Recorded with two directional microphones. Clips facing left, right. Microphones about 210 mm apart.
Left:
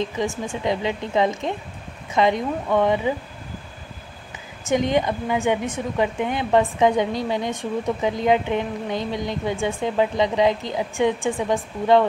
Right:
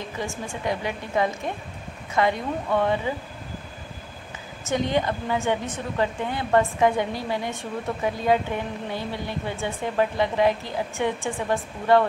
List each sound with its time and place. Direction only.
0.2 s a woman's voice: 20° left (ahead or behind)
4.6 s speech: 20° left (ahead or behind)